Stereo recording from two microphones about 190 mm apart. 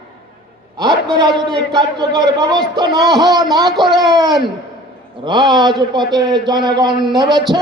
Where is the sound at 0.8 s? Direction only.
25° right (ahead or behind).